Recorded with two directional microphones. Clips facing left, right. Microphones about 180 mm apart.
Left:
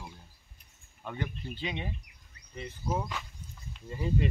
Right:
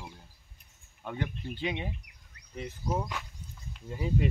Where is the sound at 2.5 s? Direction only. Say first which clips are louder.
Right 1 dB; centre (ahead or behind).